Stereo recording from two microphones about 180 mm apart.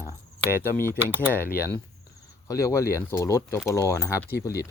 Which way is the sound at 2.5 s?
15° left (ahead or behind).